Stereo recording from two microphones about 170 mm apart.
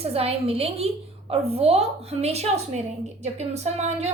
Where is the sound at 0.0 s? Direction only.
35° right (ahead or behind).